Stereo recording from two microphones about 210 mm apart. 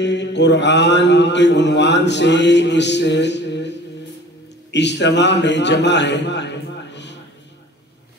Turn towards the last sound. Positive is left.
turn(degrees=55)  # may be behind; listen again after turning